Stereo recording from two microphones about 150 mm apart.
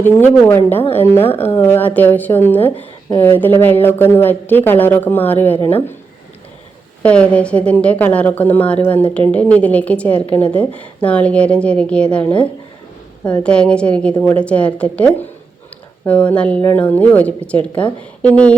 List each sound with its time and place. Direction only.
0.0 s a woman's voice: 15° left (ahead or behind)
7.0 s a woman's voice: 10° left (ahead or behind)